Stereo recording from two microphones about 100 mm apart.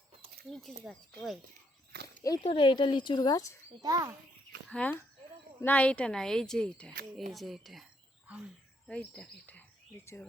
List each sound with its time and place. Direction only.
0.5 s speech: 5° left (ahead or behind)
2.4 s speech: 55° left (ahead or behind); by 3.6 s 35° left (ahead or behind)
3.8 s speech: 35° right (ahead or behind)
4.7 s speech: 15° left (ahead or behind); by 7.9 s centre (ahead or behind)
8.9 s speech: 10° left (ahead or behind)